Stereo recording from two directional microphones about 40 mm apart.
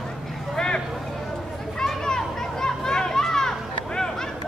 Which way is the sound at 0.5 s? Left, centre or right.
Left.